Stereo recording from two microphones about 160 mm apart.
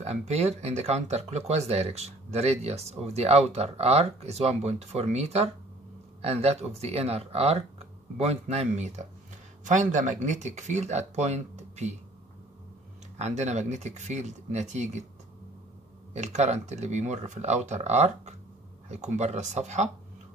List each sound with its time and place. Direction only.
0.0 s speech: 40° right (ahead or behind)
13.2 s speech: 45° right (ahead or behind)
16.1 s speech: 45° right (ahead or behind)